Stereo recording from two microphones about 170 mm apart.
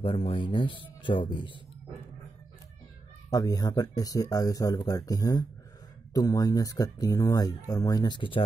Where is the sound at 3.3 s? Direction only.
20° left (ahead or behind).